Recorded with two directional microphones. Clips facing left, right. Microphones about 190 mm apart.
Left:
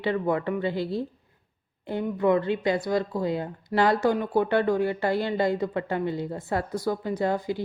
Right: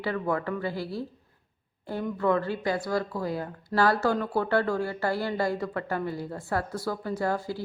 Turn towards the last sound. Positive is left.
turn(degrees=20)  # may be behind; listen again after turning